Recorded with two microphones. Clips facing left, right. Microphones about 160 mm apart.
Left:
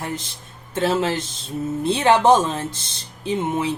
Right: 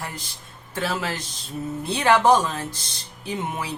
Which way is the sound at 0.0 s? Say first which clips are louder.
Left 6 dB; 25° left (ahead or behind).